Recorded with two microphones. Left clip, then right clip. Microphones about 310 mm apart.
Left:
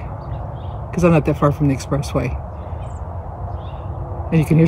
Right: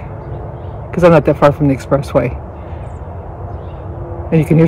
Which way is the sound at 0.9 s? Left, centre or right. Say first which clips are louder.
Right 8 dB; centre.